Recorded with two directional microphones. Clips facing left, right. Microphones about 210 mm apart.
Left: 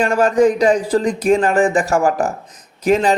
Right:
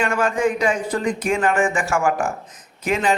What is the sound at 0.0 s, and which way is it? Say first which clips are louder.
A man's voice: left 7 dB; 40° left (ahead or behind).